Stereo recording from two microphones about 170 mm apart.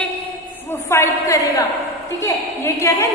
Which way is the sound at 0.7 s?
15° left (ahead or behind).